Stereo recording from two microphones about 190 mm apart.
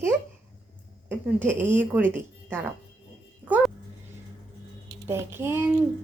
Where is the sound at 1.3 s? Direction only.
10° right (ahead or behind).